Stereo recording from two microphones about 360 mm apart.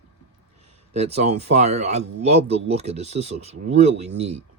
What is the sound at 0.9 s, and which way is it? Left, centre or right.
Speech, centre.